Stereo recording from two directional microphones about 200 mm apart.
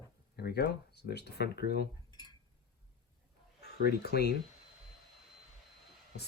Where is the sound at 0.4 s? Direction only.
50° left (ahead or behind).